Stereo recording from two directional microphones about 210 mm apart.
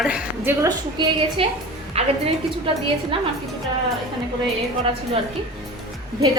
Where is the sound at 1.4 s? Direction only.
25° right (ahead or behind).